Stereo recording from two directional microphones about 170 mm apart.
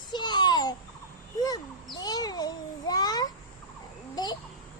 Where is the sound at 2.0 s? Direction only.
25° left (ahead or behind).